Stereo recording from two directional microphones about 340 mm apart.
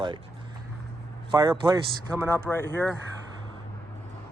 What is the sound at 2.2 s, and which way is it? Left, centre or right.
Speech, centre.